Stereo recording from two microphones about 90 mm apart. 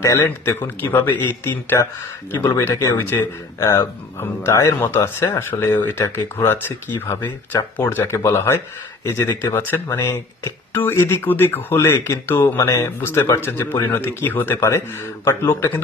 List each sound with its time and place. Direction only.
0.0 s speech: 35° left (ahead or behind)
0.6 s speech: 25° left (ahead or behind)